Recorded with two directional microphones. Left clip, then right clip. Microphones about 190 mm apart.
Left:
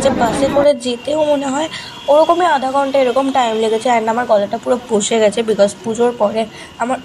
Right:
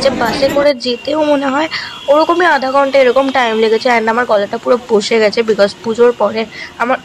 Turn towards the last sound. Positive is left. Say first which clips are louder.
# right 4 dB
turn(degrees=-35)  # may be behind; listen again after turning